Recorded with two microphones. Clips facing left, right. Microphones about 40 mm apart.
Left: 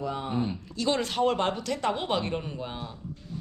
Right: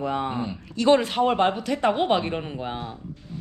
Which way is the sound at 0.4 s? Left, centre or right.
Right.